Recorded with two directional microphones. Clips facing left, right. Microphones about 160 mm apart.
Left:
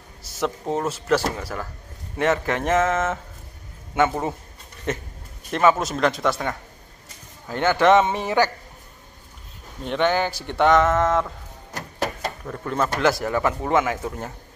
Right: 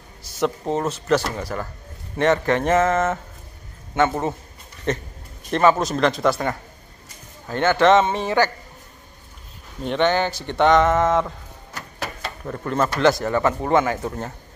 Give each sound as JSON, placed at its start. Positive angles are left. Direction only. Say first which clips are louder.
{"t": 0.4, "sound": "a man's voice", "louder": "right 2 dB", "side_deg": 5}
{"t": 7.4, "sound": "a man's voice", "louder": "right 1 dB", "side_deg": 10}
{"t": 9.8, "sound": "speech", "louder": "right 2 dB", "side_deg": 5}
{"t": 11.7, "sound": "a sound", "louder": "left 5 dB", "side_deg": 40}
{"t": 12.4, "sound": "speech", "louder": "right 3 dB", "side_deg": 0}